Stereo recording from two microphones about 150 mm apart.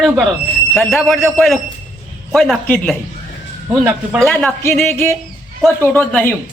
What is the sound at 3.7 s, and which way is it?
Speech, 10° right (ahead or behind).